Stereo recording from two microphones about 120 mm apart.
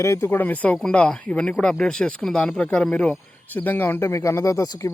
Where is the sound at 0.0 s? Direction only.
25° left (ahead or behind).